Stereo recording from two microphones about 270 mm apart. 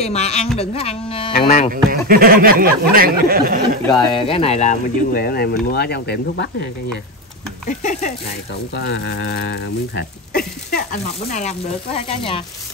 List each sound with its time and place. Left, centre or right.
0.0 s speech: left
1.7 s speech: right
3.8 s speech: centre; by 6.7 s left
8.7 s speech: left; by 12.4 s centre